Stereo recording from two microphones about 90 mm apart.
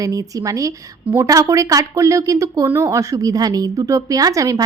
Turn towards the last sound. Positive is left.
turn(degrees=-40)  # may be behind; listen again after turning